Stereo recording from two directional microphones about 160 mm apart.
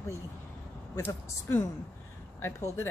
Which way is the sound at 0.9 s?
15° left (ahead or behind).